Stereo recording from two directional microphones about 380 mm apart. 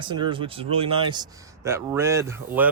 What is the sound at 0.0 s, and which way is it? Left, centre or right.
A man's voice, centre.